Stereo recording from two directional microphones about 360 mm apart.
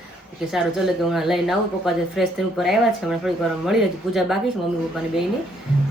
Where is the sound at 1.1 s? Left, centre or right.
Centre.